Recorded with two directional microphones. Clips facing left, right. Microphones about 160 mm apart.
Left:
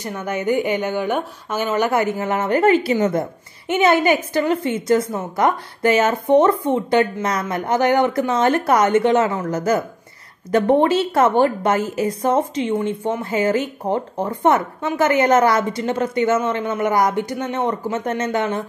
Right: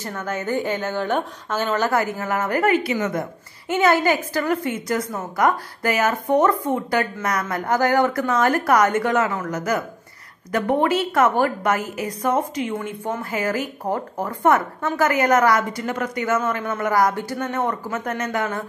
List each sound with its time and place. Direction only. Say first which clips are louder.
0.0 s a woman's voice: left 4 dB; 15° left (ahead or behind)